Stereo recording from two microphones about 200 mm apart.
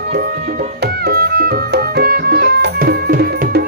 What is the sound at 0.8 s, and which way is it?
Music, 50° right (ahead or behind).